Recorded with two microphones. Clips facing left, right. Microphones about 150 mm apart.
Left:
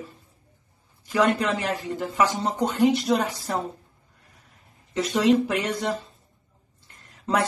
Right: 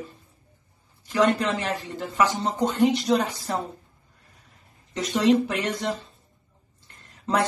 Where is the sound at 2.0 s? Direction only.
5° left (ahead or behind).